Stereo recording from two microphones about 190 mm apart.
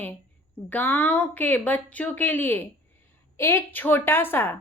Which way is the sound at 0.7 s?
10° left (ahead or behind).